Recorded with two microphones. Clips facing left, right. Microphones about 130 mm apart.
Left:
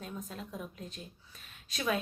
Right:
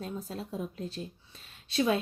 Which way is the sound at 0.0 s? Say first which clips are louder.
Right 5 dB; 35° right (ahead or behind).